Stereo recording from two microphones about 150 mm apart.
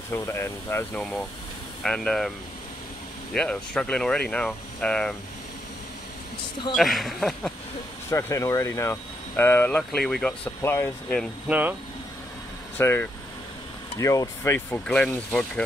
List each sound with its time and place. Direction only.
0.1 s speech: 15° left (ahead or behind)
1.8 s speech: 5° left (ahead or behind)
3.3 s speech: 5° left (ahead or behind)
6.7 s speech: centre (ahead or behind)
8.1 s speech: 20° left (ahead or behind)
11.4 s speech: 10° right (ahead or behind)
12.7 s speech: 15° left (ahead or behind)